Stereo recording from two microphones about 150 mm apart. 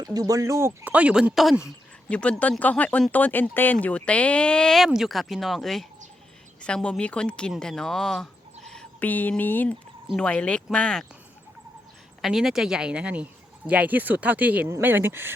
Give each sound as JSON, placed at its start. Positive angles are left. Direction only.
{"t": 0.0, "sound": "speech", "side_deg": -25}
{"t": 12.2, "sound": "speech", "side_deg": 0}